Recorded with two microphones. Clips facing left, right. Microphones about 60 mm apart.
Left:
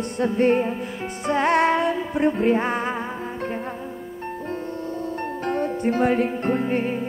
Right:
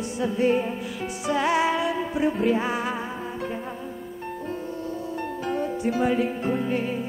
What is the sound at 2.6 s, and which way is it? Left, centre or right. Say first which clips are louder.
Music: left 2 dB; left.